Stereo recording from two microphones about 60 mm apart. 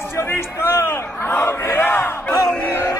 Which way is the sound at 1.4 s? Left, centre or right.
Left.